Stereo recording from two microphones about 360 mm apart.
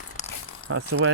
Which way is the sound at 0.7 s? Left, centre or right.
Right.